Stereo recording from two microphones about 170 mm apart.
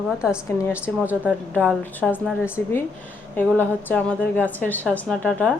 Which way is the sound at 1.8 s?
10° left (ahead or behind).